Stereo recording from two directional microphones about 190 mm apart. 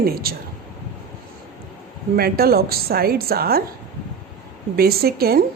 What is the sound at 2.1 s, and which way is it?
Speech, 55° right (ahead or behind).